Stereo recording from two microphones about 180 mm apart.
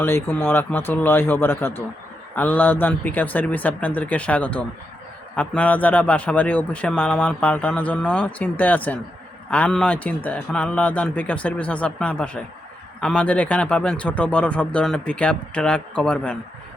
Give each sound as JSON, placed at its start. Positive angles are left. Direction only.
{"t": 0.0, "sound": "a man's voice", "side_deg": 10}